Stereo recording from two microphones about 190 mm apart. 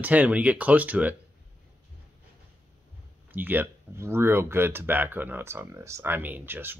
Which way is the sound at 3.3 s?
10° right (ahead or behind).